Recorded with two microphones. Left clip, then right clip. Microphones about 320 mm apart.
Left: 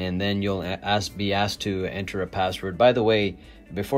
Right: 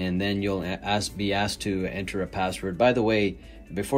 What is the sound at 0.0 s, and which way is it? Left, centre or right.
Speech, left.